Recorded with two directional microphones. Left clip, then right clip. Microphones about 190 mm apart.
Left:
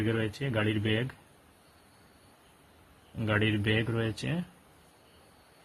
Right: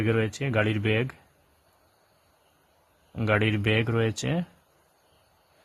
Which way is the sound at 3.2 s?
50° right (ahead or behind).